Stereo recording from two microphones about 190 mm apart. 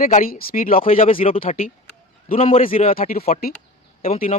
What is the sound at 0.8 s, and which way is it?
A man's voice, 30° left (ahead or behind).